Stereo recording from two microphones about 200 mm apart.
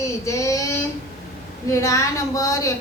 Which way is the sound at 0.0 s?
15° left (ahead or behind).